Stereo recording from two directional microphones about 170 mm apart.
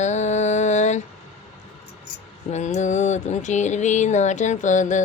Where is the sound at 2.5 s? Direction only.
45° left (ahead or behind).